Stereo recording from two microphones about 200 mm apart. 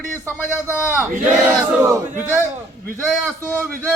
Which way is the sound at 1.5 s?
10° right (ahead or behind).